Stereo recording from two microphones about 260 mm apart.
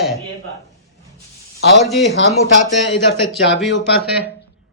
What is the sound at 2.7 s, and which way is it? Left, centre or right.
Speech, left.